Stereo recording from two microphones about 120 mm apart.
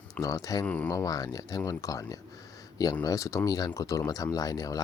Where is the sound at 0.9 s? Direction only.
30° left (ahead or behind).